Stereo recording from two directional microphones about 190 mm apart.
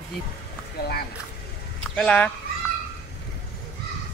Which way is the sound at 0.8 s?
55° left (ahead or behind).